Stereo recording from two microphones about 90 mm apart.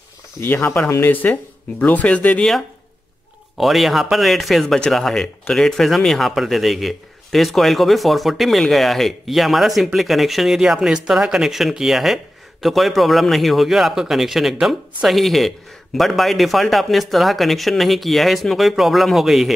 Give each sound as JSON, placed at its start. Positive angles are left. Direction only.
{"t": 0.4, "sound": "speech", "side_deg": 20}
{"t": 3.5, "sound": "speech", "side_deg": 0}